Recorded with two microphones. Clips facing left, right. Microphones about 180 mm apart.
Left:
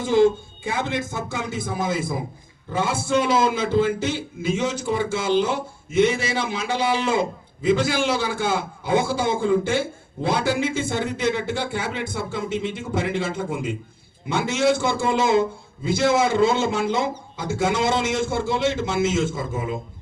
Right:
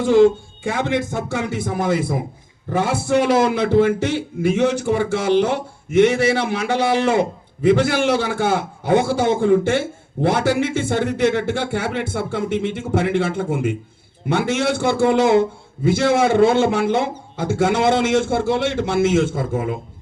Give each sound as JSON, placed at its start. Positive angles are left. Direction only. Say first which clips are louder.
{"t": 0.0, "sound": "a man's voice", "louder": "right 4 dB", "side_deg": -70}